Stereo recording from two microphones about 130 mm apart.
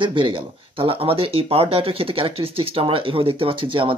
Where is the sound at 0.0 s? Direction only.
40° right (ahead or behind).